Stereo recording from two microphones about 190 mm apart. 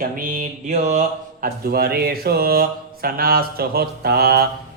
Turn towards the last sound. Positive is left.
turn(degrees=-55)  # may be behind; listen again after turning